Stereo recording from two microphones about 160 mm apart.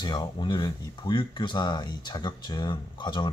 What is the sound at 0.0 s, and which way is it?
Speech, 30° left (ahead or behind).